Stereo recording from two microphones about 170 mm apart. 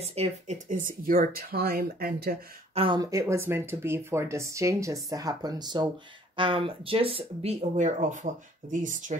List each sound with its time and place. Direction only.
0.0 s speech: 40° right (ahead or behind)
1.0 s speech: 55° right (ahead or behind)
2.7 s speech: 30° right (ahead or behind); by 9.1 s 50° right (ahead or behind)